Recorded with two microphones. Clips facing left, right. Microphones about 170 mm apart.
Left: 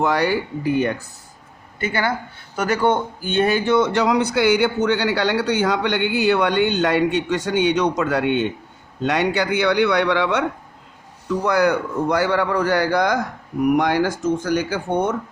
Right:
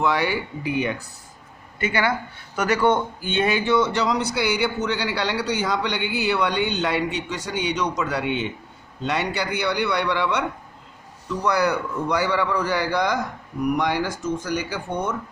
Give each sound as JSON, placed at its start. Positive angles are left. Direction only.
{"t": 0.0, "sound": "a man's voice", "side_deg": 40}
{"t": 2.6, "sound": "a man's voice", "side_deg": 30}
{"t": 3.2, "sound": "speech", "side_deg": 45}